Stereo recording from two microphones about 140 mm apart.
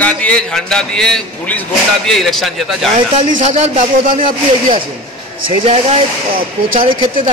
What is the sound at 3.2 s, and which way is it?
Speech, 50° right (ahead or behind).